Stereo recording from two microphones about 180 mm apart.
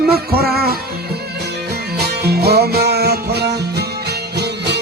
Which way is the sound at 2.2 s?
65° right (ahead or behind).